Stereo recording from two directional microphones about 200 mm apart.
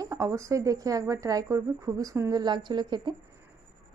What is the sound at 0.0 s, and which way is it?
A woman's voice, 15° right (ahead or behind).